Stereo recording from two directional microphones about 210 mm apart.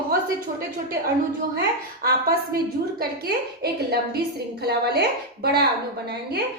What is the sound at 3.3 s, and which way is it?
A woman's voice, 50° right (ahead or behind).